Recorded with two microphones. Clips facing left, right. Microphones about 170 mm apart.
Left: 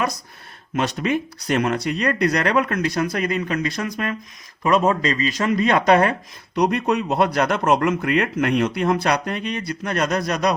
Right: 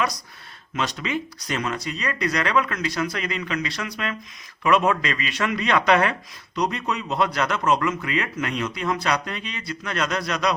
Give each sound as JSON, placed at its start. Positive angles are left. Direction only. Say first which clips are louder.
{"t": 0.8, "sound": "speech", "louder": "left 5 dB", "side_deg": 50}
{"t": 4.6, "sound": "speech", "louder": "left 2 dB", "side_deg": 35}
{"t": 6.6, "sound": "speech", "louder": "left 6 dB", "side_deg": 55}